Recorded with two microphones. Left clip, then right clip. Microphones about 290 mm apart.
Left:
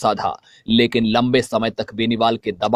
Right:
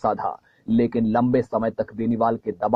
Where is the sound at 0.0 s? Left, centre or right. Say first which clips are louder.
Left 4 dB; left.